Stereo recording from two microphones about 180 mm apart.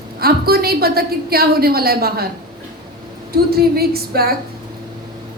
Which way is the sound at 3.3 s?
60° right (ahead or behind).